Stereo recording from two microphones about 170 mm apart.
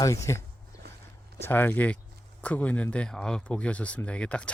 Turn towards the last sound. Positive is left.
turn(degrees=5)  # may be behind; listen again after turning